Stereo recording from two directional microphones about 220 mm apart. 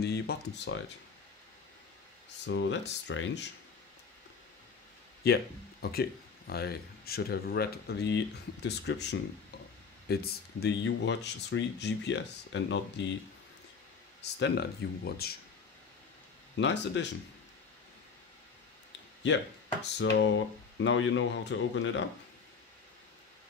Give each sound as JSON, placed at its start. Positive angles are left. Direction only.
{"t": 0.0, "sound": "speech", "side_deg": 45}
{"t": 2.4, "sound": "speech", "side_deg": 55}
{"t": 5.2, "sound": "speech", "side_deg": 45}
{"t": 14.2, "sound": "speech", "side_deg": 50}
{"t": 16.5, "sound": "speech", "side_deg": 55}
{"t": 19.2, "sound": "speech", "side_deg": 55}